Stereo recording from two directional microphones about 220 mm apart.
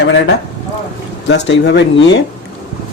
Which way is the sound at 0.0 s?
50° left (ahead or behind).